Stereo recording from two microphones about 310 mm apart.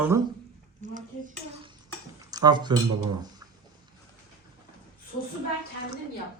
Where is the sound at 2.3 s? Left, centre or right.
Centre.